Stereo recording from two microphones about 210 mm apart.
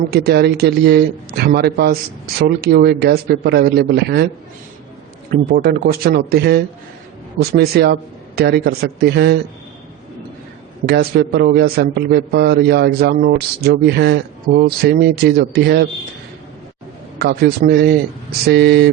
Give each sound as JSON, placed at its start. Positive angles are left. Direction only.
{"t": 0.1, "sound": "a man's voice", "side_deg": -50}
{"t": 5.3, "sound": "a man's voice", "side_deg": -45}
{"t": 10.8, "sound": "a man's voice", "side_deg": -50}
{"t": 17.2, "sound": "a man's voice", "side_deg": -50}